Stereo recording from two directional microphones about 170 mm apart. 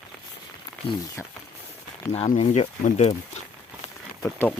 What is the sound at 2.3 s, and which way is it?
Speech, 45° left (ahead or behind).